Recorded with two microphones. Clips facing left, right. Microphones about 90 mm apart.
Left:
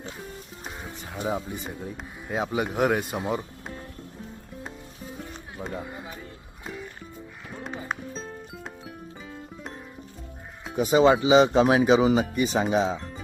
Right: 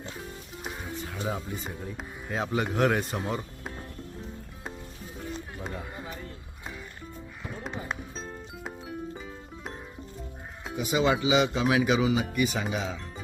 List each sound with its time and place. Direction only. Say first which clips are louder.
1.1 s speech: left 5 dB; 15° left (ahead or behind)
7.6 s music: left 3 dB; centre (ahead or behind)
10.8 s speech: left 7 dB; 35° left (ahead or behind)